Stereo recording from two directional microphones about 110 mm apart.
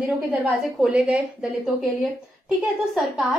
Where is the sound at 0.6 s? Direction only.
5° right (ahead or behind).